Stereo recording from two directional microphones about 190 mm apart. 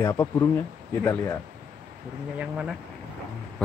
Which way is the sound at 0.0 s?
15° left (ahead or behind).